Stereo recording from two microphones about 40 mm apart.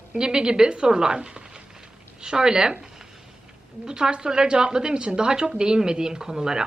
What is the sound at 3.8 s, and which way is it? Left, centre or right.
A woman's voice, centre.